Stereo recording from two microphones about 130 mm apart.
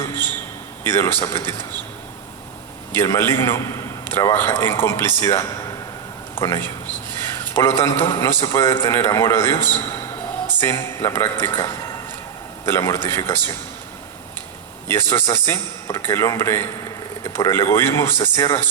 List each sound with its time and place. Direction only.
0.0 s a sound: 15° left (ahead or behind)
0.9 s speech: 20° left (ahead or behind)
3.1 s a man's voice: 20° left (ahead or behind)
14.8 s speech: 20° left (ahead or behind)